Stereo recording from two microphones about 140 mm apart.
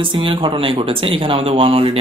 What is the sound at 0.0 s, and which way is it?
Speech, 35° right (ahead or behind).